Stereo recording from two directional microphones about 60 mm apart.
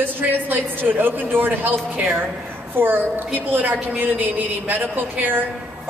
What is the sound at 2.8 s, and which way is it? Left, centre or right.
A woman's voice, right.